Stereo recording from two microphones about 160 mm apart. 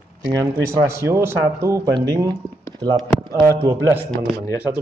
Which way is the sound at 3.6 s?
15° right (ahead or behind).